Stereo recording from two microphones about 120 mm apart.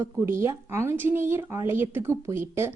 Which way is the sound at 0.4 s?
20° right (ahead or behind).